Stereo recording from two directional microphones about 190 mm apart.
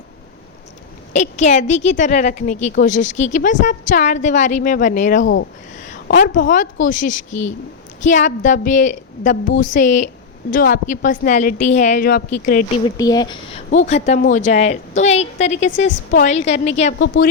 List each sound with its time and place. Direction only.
1.1 s a woman's voice: 40° left (ahead or behind)
5.2 s speech: 85° left
5.7 s a sound: 40° left (ahead or behind)
6.1 s a woman's voice: 45° left (ahead or behind)
13.0 s speech: 20° left (ahead or behind)
13.7 s a woman's voice: 40° left (ahead or behind)